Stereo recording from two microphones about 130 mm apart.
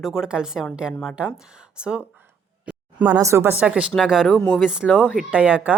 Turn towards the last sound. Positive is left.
turn(degrees=-10)  # may be behind; listen again after turning